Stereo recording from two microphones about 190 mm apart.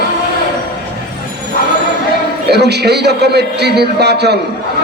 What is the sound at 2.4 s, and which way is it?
A man's voice, 60° right (ahead or behind).